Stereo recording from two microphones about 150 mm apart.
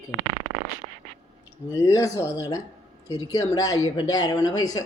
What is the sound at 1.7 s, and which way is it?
A woman's voice, 20° left (ahead or behind).